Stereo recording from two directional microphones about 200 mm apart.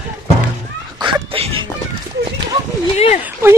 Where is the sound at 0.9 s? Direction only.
25° right (ahead or behind).